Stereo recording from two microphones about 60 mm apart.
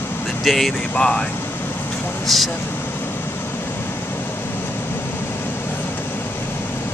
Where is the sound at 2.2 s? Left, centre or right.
Centre.